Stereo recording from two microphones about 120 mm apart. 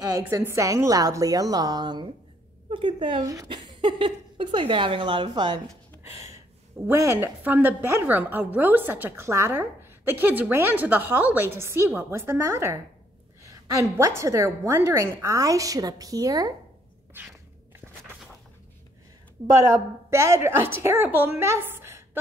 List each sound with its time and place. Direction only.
0.2 s a woman's voice: 20° right (ahead or behind); by 5.6 s 40° right (ahead or behind)
6.9 s a woman's voice: 20° right (ahead or behind)
17.1 s a woman's voice: 15° right (ahead or behind)
19.6 s a woman's voice: 25° right (ahead or behind)